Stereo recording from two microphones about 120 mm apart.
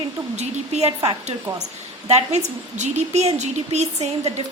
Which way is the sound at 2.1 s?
70° right (ahead or behind).